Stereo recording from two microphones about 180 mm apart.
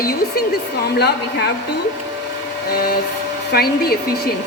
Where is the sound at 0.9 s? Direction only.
65° left (ahead or behind).